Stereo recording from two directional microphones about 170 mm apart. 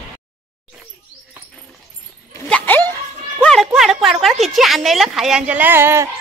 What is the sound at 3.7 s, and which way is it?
A woman's voice, centre (ahead or behind).